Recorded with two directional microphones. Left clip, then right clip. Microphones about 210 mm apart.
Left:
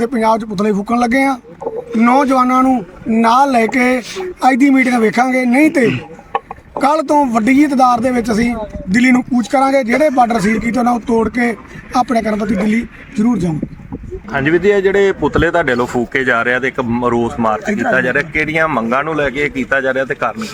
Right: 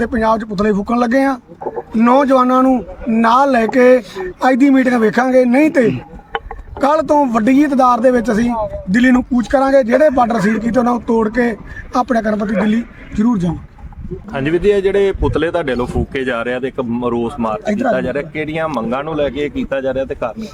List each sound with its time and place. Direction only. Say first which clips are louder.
0.0 s a man's voice: left 1 dB; 5° right (ahead or behind)
14.3 s a man's voice: left 2 dB; 20° left (ahead or behind)